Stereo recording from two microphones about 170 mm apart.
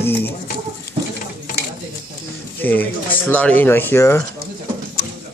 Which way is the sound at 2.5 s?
10° left (ahead or behind).